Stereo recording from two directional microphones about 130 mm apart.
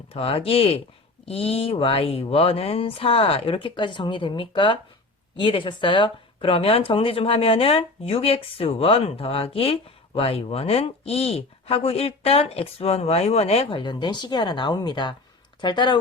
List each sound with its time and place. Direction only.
0.1 s speech: 50° left (ahead or behind)